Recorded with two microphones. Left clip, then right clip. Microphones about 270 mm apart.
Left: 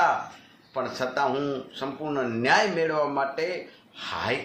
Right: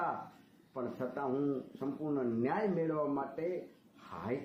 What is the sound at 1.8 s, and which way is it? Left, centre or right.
Speech, left.